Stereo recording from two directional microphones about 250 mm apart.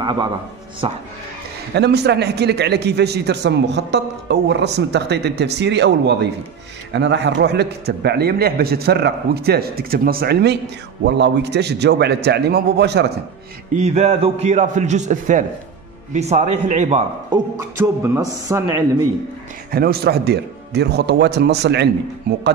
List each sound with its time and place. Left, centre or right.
0.0 s a man's voice: centre
1.8 s a man's voice: right
13.7 s a man's voice: right
17.3 s speech: centre
19.7 s a man's voice: right